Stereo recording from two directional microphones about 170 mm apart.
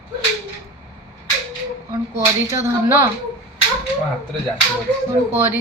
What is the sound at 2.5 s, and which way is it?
Speech, 15° right (ahead or behind).